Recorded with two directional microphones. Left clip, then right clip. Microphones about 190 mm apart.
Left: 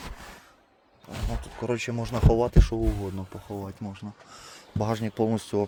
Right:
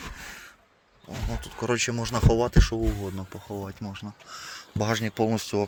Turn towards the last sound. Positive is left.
turn(degrees=10)  # may be behind; listen again after turning